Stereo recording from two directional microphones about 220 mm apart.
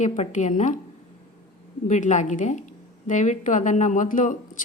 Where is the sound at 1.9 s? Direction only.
35° left (ahead or behind).